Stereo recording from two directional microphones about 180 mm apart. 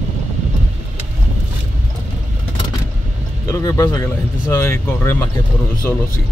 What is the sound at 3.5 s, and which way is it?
Speech, 20° left (ahead or behind).